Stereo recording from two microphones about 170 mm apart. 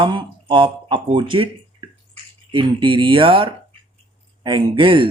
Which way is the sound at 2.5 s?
30° right (ahead or behind).